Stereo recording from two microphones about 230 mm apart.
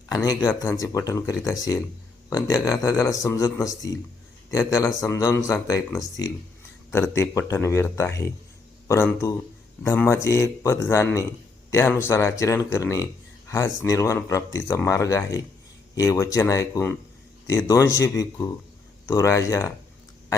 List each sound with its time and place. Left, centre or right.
0.1 s speech: centre